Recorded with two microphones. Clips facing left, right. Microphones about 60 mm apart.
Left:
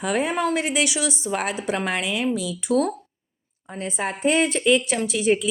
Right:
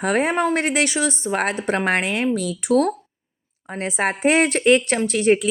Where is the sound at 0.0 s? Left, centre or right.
Right.